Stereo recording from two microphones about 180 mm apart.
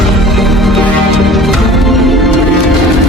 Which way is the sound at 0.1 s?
Centre (ahead or behind).